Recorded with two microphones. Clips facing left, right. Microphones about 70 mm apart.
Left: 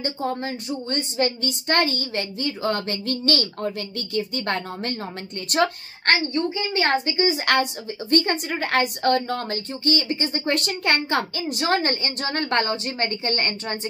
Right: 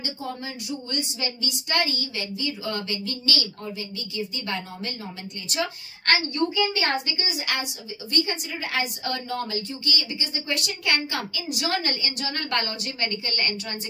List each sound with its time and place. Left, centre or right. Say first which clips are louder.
0.0 s a woman's voice: left 6 dB; left
6.0 s a woman's voice: left 2 dB; left
7.4 s a woman's voice: left 9 dB; left